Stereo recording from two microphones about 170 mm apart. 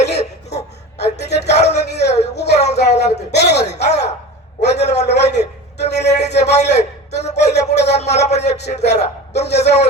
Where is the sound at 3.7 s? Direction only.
40° left (ahead or behind).